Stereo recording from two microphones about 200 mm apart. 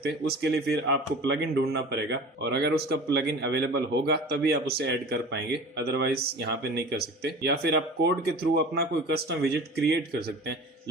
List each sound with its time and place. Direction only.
0.0 s speech: 55° right (ahead or behind)